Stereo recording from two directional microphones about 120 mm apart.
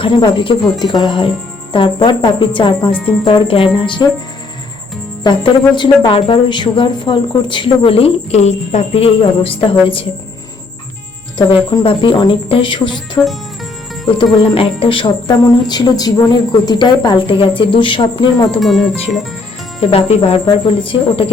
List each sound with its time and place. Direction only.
0.0 s a woman's voice: 40° left (ahead or behind)
5.2 s a woman's voice: 40° left (ahead or behind)
11.3 s a woman's voice: 40° left (ahead or behind)
14.3 s a woman's voice: 50° left (ahead or behind)
15.4 s a woman's voice: 35° left (ahead or behind)
18.6 s speech: centre (ahead or behind)
19.8 s a woman's voice: 55° left (ahead or behind)